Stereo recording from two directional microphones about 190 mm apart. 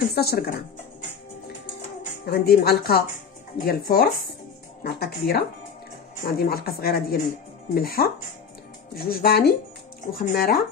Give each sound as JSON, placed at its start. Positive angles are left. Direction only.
{"t": 0.1, "sound": "a woman's voice", "side_deg": 55}
{"t": 2.2, "sound": "a woman's voice", "side_deg": 55}